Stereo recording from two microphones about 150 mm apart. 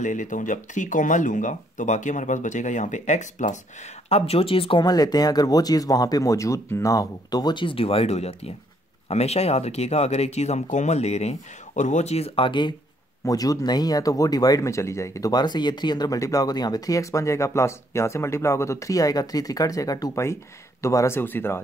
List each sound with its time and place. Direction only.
0.0 s speech: 55° left (ahead or behind)
4.1 s speech: 40° left (ahead or behind); by 21.5 s 15° left (ahead or behind)